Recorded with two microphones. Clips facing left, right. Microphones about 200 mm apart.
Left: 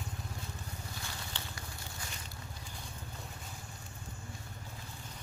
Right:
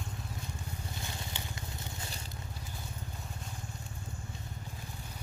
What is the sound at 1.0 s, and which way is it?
Vehicle, 20° right (ahead or behind).